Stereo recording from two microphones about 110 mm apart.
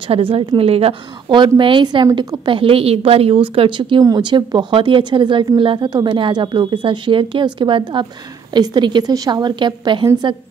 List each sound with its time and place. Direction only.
0.1 s speech: 60° right (ahead or behind)
1.4 s speech: 50° right (ahead or behind)